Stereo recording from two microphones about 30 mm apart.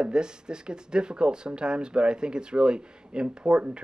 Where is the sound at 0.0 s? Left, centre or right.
Right.